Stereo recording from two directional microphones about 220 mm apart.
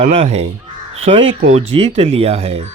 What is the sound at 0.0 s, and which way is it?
Speech, 30° right (ahead or behind).